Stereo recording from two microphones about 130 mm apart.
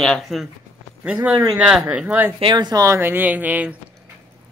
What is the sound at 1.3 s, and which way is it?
Speech, 30° right (ahead or behind).